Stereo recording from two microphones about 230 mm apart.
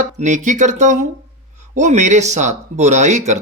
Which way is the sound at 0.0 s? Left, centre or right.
Right.